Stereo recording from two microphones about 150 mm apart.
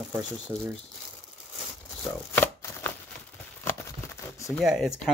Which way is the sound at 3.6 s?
15° left (ahead or behind).